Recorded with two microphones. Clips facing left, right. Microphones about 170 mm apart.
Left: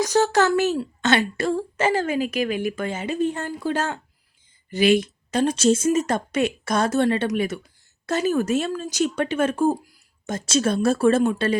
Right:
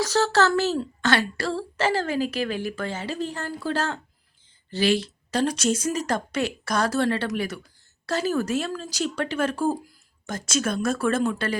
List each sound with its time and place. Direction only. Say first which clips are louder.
0.0 s a woman's voice: left 2 dB; 15° left (ahead or behind)